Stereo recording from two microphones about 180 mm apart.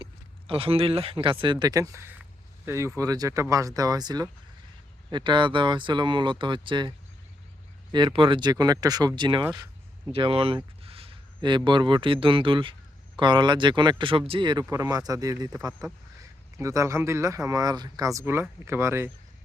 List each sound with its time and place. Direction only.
0.0 s speech: 30° right (ahead or behind)
7.9 s speech: 25° right (ahead or behind)
14.6 s speech: 15° right (ahead or behind)